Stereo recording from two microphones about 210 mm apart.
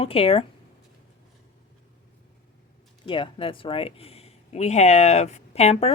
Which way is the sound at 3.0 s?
25° left (ahead or behind).